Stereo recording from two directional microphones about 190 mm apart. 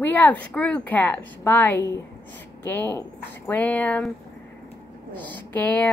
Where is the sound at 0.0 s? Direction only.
10° left (ahead or behind).